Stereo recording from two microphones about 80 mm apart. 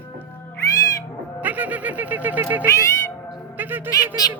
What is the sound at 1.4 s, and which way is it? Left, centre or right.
Bird, right.